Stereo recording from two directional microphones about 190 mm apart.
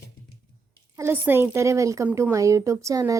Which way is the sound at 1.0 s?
10° right (ahead or behind).